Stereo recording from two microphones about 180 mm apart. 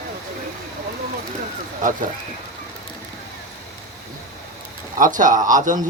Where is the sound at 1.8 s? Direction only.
45° right (ahead or behind).